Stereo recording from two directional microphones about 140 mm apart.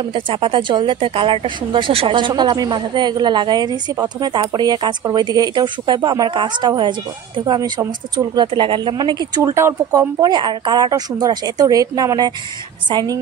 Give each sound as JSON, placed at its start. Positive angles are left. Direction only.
{"t": 0.1, "sound": "a woman's voice", "side_deg": -35}